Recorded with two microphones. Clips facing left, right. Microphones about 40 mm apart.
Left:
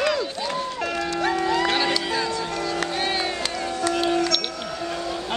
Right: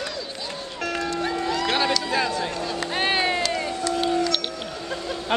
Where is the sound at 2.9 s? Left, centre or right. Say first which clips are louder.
Right 3 dB; right.